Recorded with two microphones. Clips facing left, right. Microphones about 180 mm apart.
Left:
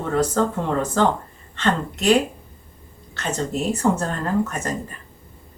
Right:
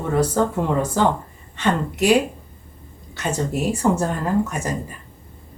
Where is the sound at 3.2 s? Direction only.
10° right (ahead or behind).